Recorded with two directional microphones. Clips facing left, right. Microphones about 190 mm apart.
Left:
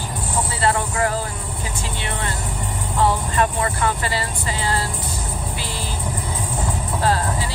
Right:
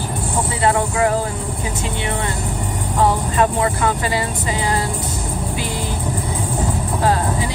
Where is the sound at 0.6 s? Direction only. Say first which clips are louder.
Right 4 dB; 20° right (ahead or behind).